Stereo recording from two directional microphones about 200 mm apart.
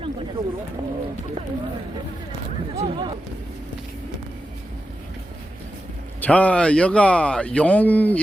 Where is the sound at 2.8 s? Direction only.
25° right (ahead or behind).